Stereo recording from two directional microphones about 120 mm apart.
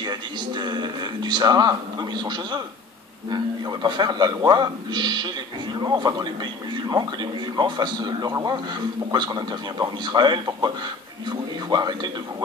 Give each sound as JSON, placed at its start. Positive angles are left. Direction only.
{"t": 0.0, "sound": "speech", "side_deg": -35}
{"t": 3.8, "sound": "speech", "side_deg": -35}
{"t": 7.5, "sound": "speech", "side_deg": -35}
{"t": 11.7, "sound": "speech", "side_deg": -35}